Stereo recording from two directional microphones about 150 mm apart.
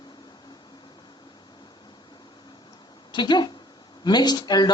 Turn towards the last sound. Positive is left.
turn(degrees=30)  # may be behind; listen again after turning